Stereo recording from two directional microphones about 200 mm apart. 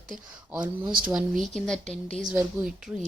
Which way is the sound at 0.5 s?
5° right (ahead or behind).